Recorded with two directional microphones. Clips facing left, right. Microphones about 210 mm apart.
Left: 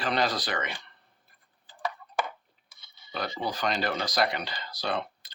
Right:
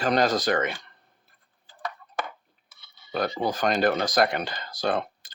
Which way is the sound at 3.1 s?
50° right (ahead or behind).